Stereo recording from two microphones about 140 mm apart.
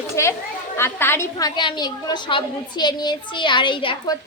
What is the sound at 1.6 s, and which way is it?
A woman's voice, 30° left (ahead or behind).